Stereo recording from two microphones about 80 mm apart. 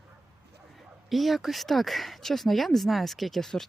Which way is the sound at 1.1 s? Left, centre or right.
Centre.